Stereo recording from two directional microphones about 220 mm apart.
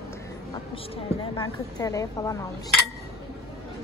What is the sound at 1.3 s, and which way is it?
A woman's voice, 15° left (ahead or behind).